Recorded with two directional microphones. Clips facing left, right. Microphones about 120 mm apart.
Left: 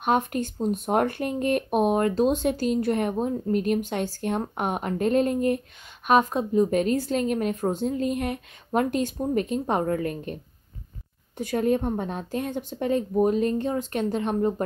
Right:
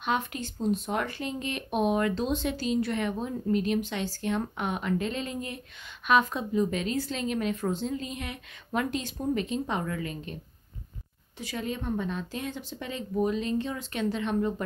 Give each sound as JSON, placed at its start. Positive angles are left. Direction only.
{"t": 0.0, "sound": "speech", "side_deg": 50}
{"t": 11.3, "sound": "speech", "side_deg": 55}